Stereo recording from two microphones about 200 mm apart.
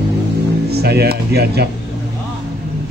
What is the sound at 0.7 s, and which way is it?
Speech, 55° right (ahead or behind).